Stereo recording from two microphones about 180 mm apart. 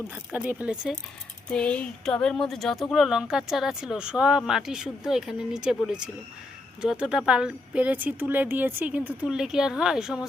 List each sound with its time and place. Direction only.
0.3 s speech: 10° right (ahead or behind)
1.5 s speech: 5° left (ahead or behind)